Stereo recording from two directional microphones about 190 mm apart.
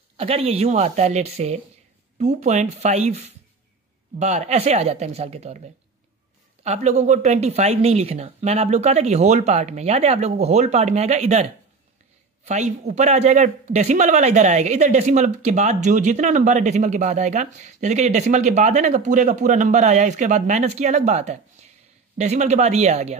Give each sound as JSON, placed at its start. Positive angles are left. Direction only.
{"t": 0.2, "sound": "a man's voice", "side_deg": -30}
{"t": 12.4, "sound": "a man's voice", "side_deg": -40}